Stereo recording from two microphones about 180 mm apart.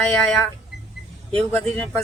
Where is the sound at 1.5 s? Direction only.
10° left (ahead or behind).